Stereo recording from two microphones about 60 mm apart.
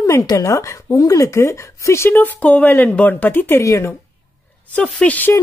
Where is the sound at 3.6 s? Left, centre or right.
Left.